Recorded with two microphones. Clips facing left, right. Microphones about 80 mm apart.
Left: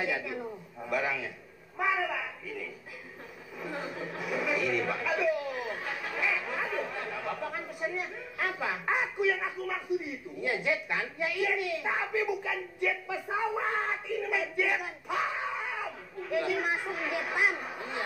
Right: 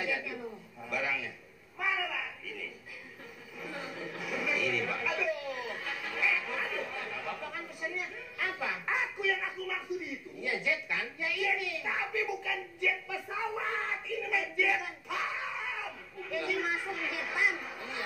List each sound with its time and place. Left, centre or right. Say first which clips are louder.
0.0 s a woman's voice: left 3 dB; left
0.8 s a man's voice: left 4 dB; left
3.5 s a woman's voice: left 4 dB; left
5.1 s a sound: left 5 dB; left
8.0 s a woman's voice: left 3 dB; left